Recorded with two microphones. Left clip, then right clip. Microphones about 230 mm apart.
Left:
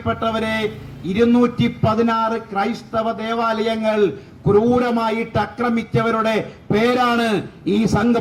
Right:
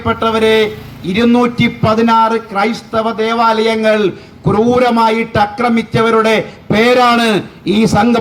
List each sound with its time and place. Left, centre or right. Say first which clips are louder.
0.0 s speech: right 9 dB; right